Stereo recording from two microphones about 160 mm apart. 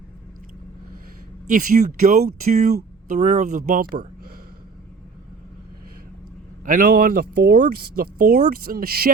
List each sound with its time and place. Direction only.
1.5 s speech: 60° right (ahead or behind)
6.7 s speech: 60° right (ahead or behind)